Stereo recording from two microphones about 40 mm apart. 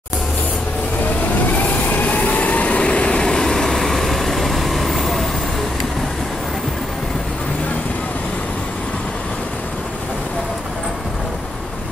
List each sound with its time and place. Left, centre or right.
1.6 s vehicle: left; by 5.2 s centre